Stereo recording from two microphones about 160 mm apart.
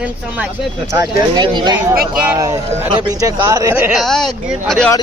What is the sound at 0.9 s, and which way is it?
Speech, 20° right (ahead or behind).